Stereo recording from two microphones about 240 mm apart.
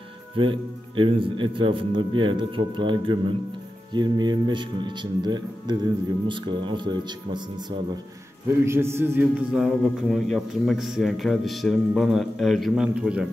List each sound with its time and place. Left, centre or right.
0.4 s a man's voice: right; by 13.3 s centre